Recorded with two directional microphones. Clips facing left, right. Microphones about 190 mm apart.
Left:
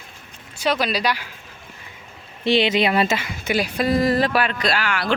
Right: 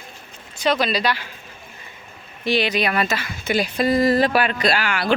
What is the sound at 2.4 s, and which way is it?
Speech, 25° left (ahead or behind).